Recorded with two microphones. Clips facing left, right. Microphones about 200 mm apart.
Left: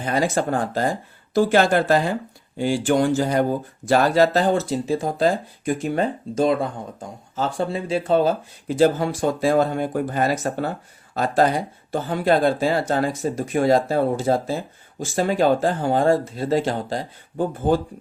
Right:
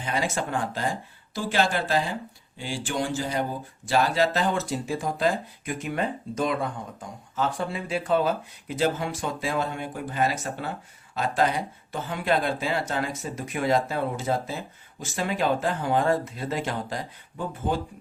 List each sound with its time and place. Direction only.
0.0 s speech: 40° left (ahead or behind)
4.7 s speech: 30° left (ahead or behind)